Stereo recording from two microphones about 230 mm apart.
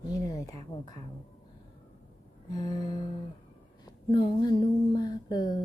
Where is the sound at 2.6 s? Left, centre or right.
Centre.